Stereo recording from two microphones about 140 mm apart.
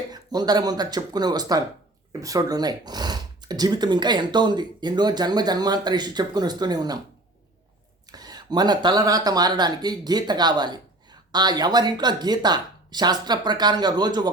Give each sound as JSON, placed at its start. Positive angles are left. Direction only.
{"t": 0.1, "sound": "speech", "side_deg": -30}
{"t": 8.1, "sound": "speech", "side_deg": -30}